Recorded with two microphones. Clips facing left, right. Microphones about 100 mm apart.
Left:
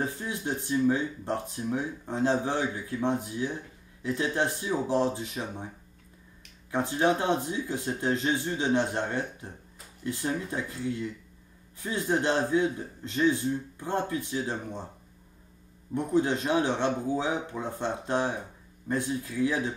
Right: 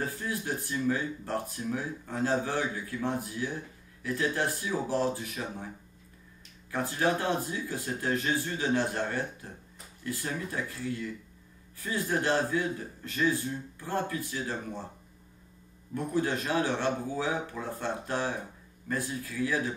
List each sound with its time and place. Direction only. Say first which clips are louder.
0.0 s a man's voice: left 2 dB; 20° left (ahead or behind)
6.7 s a man's voice: left 3 dB; 20° left (ahead or behind)
15.9 s a man's voice: left 4 dB; 20° left (ahead or behind)